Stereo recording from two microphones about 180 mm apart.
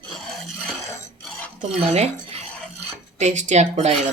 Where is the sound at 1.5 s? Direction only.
35° right (ahead or behind).